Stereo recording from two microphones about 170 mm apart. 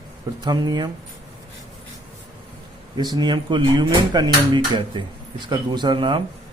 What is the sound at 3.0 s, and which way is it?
Speech, 25° right (ahead or behind).